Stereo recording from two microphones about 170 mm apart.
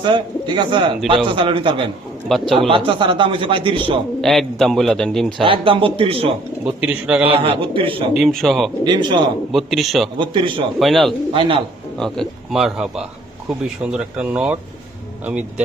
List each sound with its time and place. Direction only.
0.0 s speech: 25° right (ahead or behind)
4.2 s a man's voice: centre (ahead or behind)
5.4 s speech: 30° right (ahead or behind)
6.8 s speech: 5° right (ahead or behind)
7.3 s speech: 35° right (ahead or behind)
8.1 s a man's voice: centre (ahead or behind)
8.8 s speech: 25° right (ahead or behind)
9.5 s a man's voice: centre (ahead or behind)
10.2 s speech: 30° right (ahead or behind)
10.8 s a man's voice: centre (ahead or behind)
11.3 s speech: 30° right (ahead or behind)
11.9 s a man's voice: 5° left (ahead or behind)